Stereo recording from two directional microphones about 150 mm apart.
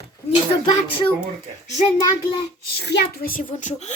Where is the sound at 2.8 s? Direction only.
90° left; by 3.5 s 70° left (ahead or behind).